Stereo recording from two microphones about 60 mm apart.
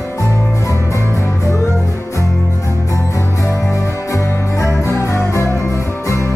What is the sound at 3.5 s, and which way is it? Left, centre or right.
Music, left.